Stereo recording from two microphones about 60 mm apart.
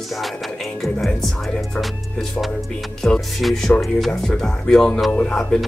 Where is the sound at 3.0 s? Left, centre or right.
Centre.